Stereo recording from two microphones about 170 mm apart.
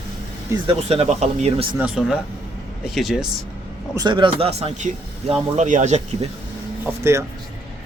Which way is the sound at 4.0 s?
25° right (ahead or behind).